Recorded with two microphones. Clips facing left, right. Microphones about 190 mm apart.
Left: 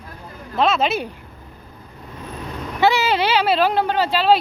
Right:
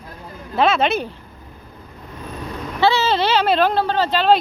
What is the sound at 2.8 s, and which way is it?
Speech, 15° left (ahead or behind).